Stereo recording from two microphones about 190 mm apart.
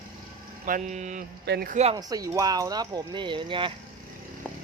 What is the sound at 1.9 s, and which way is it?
Speech, 20° right (ahead or behind).